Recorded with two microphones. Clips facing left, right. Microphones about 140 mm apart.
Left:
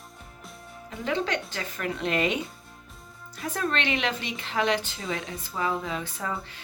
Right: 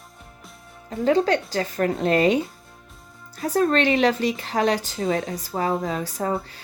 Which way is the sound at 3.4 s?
40° right (ahead or behind).